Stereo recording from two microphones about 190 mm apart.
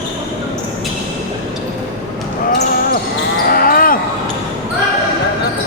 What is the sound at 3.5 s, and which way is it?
Basketball bounce, 50° left (ahead or behind).